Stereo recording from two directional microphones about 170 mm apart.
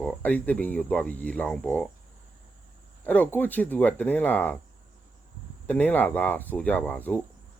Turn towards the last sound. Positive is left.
turn(degrees=10)  # may be behind; listen again after turning